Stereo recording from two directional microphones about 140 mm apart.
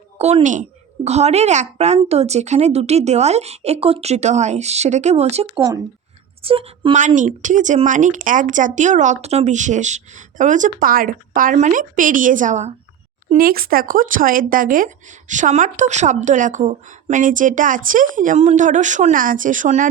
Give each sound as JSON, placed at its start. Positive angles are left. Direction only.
{"t": 0.2, "sound": "a woman's voice", "side_deg": -50}
{"t": 7.2, "sound": "speech", "side_deg": -65}
{"t": 13.3, "sound": "speech", "side_deg": -90}